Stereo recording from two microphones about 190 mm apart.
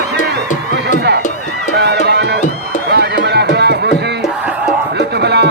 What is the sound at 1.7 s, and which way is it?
Music, 60° right (ahead or behind).